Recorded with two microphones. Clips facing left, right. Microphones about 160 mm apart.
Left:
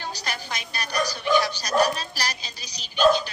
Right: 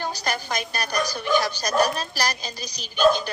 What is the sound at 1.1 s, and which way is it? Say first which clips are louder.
Speech: left 2 dB; 45° right (ahead or behind).